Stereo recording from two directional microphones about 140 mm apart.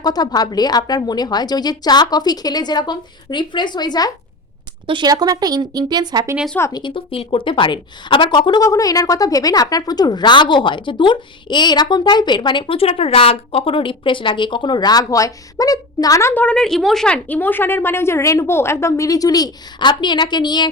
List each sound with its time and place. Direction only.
0.0 s a woman's voice: 30° left (ahead or behind)
4.9 s speech: 30° right (ahead or behind)
6.7 s speech: 35° left (ahead or behind)